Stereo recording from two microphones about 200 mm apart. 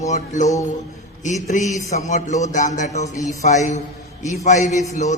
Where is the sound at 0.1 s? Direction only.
35° left (ahead or behind).